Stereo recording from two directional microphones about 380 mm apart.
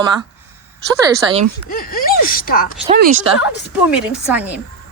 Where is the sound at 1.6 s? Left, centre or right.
Left.